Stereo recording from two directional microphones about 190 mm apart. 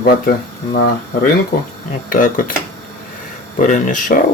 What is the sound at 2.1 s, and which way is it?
Speech, 45° left (ahead or behind).